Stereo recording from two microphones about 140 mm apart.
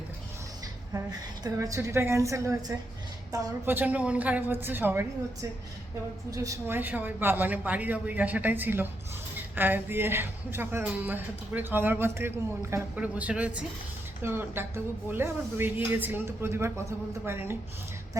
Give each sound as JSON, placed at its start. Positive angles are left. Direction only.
{"t": 1.5, "sound": "a woman's voice", "side_deg": -25}
{"t": 3.7, "sound": "a woman's voice", "side_deg": -10}